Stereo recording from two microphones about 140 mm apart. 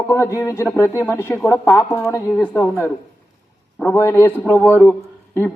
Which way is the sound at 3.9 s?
15° left (ahead or behind).